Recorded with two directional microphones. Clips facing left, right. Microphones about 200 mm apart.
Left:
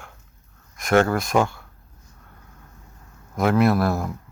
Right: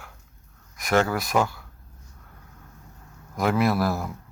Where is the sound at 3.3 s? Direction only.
Centre (ahead or behind).